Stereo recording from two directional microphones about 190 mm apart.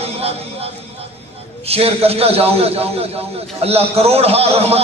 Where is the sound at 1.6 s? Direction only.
30° right (ahead or behind).